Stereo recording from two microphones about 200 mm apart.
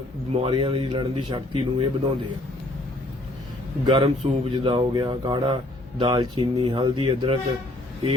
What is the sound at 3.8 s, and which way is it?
Speech, 25° right (ahead or behind).